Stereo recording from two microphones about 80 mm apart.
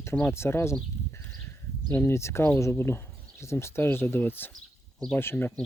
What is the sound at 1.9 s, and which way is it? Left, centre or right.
Speech, left.